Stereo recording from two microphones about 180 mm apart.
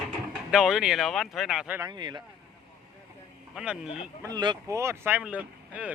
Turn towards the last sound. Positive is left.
turn(degrees=-10)  # may be behind; listen again after turning